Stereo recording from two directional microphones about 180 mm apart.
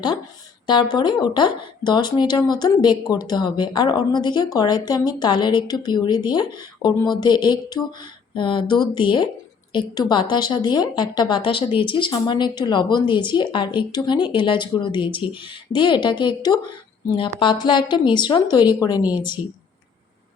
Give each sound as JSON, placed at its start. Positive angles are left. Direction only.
{"t": 0.7, "sound": "speech", "side_deg": 25}